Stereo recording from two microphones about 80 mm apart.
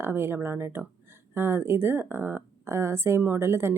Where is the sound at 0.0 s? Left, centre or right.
Right.